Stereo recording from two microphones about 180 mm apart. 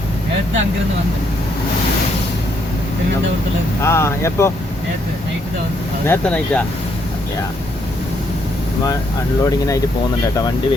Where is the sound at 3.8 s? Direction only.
15° left (ahead or behind).